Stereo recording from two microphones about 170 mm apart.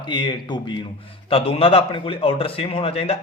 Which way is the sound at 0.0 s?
25° left (ahead or behind).